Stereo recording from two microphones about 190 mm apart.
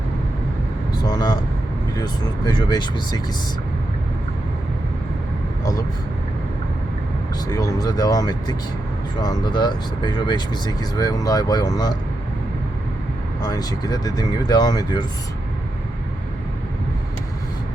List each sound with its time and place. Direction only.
0.9 s speech: 20° left (ahead or behind)
7.4 s speech: 20° left (ahead or behind)
13.4 s speech: 20° left (ahead or behind)